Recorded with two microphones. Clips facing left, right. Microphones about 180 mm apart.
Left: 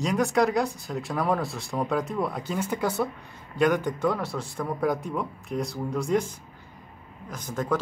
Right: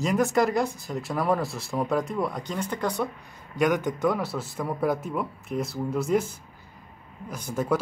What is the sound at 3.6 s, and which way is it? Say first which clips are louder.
Speech: even; 20° right (ahead or behind).